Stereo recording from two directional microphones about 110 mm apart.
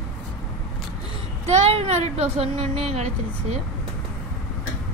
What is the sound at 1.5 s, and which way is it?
Speech, 75° right (ahead or behind).